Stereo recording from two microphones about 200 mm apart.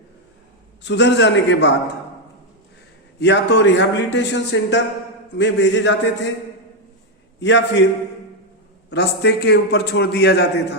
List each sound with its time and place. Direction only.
0.8 s a man's voice: 60° left (ahead or behind)
3.2 s a man's voice: 60° left (ahead or behind)
7.3 s a man's voice: 65° left (ahead or behind)
8.9 s a man's voice: 60° left (ahead or behind)